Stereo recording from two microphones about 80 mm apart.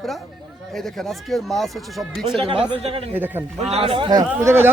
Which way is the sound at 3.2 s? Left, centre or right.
Right.